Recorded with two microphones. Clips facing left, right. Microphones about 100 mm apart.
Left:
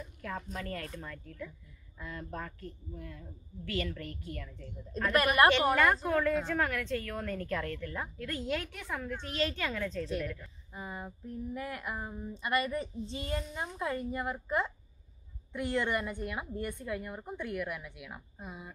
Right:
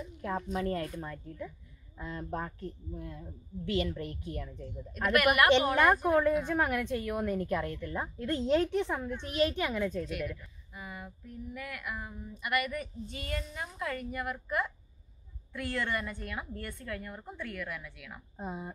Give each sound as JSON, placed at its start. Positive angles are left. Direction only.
{"t": 0.2, "sound": "a woman's voice", "side_deg": -25}
{"t": 4.9, "sound": "a sound", "side_deg": 30}
{"t": 6.0, "sound": "a woman's voice", "side_deg": -20}
{"t": 10.4, "sound": "a sound", "side_deg": 30}
{"t": 15.5, "sound": "a woman's voice", "side_deg": 20}
{"t": 18.4, "sound": "speech", "side_deg": -30}